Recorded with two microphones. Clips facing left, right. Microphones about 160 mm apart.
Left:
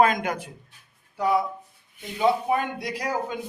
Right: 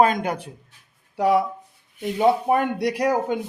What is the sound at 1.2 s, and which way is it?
Speech, 80° right.